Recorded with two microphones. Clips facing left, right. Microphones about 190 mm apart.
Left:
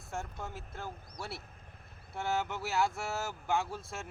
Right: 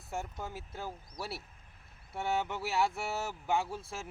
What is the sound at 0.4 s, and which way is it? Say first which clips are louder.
Speech: right 1 dB; 5° right (ahead or behind).